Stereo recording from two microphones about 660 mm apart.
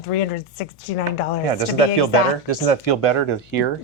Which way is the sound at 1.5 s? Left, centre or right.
Left.